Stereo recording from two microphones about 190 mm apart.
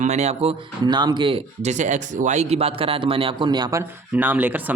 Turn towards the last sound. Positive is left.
turn(degrees=-10)  # may be behind; listen again after turning